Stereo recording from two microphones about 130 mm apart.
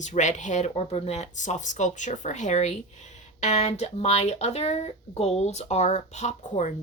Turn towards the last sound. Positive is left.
turn(degrees=65)  # may be behind; listen again after turning